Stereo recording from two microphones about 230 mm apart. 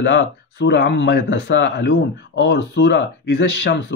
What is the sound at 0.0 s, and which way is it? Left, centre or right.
Speech, left.